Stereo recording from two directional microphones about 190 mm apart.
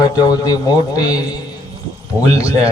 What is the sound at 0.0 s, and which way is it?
A man's voice, 20° left (ahead or behind).